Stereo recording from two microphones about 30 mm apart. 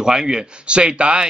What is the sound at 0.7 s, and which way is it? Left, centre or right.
Speech, right.